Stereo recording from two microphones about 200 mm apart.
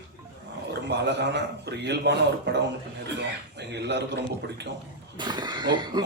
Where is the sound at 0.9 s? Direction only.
60° right (ahead or behind).